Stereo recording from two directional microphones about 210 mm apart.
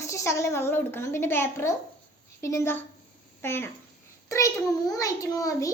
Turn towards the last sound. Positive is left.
turn(degrees=15)  # may be behind; listen again after turning